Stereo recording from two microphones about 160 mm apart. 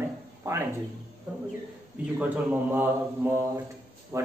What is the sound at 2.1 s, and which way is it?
A man's voice, 10° right (ahead or behind).